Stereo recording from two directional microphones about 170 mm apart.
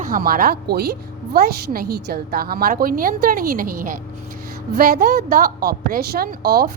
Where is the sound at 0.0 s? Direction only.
55° right (ahead or behind).